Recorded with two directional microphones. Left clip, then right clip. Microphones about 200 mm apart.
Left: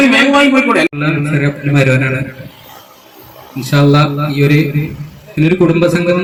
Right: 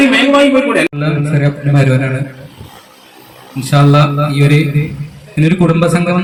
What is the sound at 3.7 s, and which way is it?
A man's voice, 45° right (ahead or behind).